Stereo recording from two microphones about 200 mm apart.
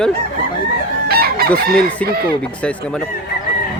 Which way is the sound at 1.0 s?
50° right (ahead or behind).